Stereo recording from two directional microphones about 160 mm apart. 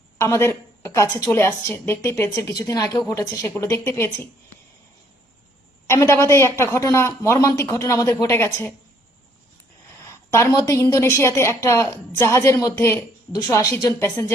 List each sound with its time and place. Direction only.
0.2 s a woman's voice: 15° left (ahead or behind)
5.9 s a woman's voice: 15° left (ahead or behind)
10.0 s a woman's voice: 20° left (ahead or behind)